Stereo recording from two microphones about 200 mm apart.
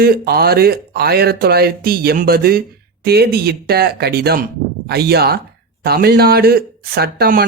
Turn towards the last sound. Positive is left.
turn(degrees=-50)  # may be behind; listen again after turning